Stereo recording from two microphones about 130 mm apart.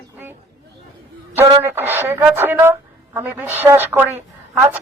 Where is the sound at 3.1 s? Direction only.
15° right (ahead or behind).